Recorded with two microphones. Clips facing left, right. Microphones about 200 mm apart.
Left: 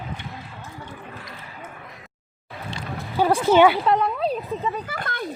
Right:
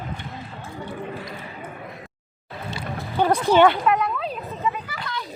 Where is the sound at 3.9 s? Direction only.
35° left (ahead or behind); by 5.3 s 50° left (ahead or behind).